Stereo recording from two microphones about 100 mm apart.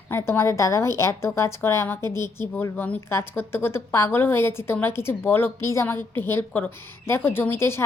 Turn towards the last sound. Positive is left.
turn(degrees=25)  # may be behind; listen again after turning